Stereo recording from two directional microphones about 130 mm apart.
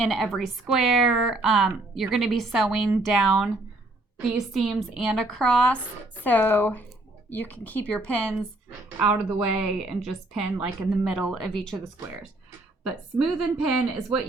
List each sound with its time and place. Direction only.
0.0 s a woman's voice: centre (ahead or behind)
9.0 s a woman's voice: 10° right (ahead or behind)
12.8 s a woman's voice: 5° right (ahead or behind)